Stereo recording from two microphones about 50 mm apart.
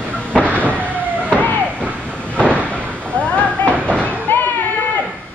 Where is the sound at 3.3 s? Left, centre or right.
Left.